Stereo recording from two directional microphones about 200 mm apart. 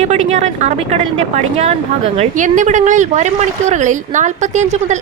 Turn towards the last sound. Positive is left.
turn(degrees=-35)  # may be behind; listen again after turning